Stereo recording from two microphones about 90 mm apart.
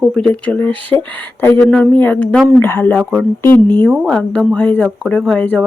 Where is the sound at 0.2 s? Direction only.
15° left (ahead or behind).